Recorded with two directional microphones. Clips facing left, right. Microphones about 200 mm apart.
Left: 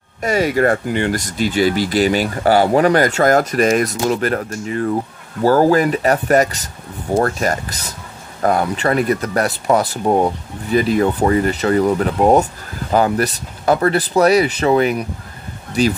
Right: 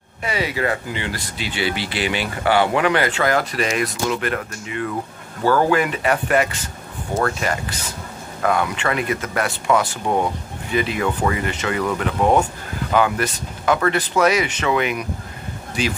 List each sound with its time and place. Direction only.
0.2 s speech: 45° left (ahead or behind)